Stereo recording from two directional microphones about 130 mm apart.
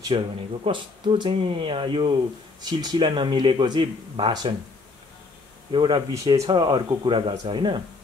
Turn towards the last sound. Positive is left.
turn(degrees=-35)  # may be behind; listen again after turning